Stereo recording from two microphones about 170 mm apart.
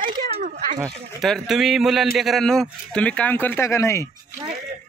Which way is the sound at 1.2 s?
Centre (ahead or behind).